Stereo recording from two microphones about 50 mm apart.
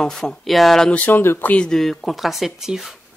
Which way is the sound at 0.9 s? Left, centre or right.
Left.